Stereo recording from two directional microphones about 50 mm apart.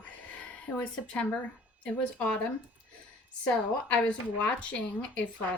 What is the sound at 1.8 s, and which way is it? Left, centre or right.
Speech, left.